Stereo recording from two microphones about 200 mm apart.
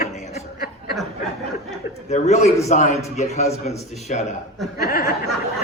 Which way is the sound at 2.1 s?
35° left (ahead or behind).